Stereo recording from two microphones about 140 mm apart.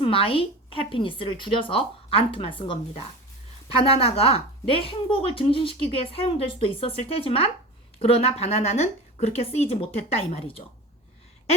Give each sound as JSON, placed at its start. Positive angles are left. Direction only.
{"t": 0.0, "sound": "a woman's voice", "side_deg": 40}